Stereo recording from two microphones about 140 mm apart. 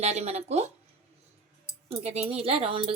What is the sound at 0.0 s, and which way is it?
Speech, 50° right (ahead or behind).